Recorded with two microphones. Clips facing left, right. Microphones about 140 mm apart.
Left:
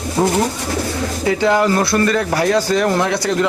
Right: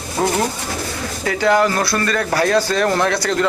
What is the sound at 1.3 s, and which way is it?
Speech, 20° left (ahead or behind).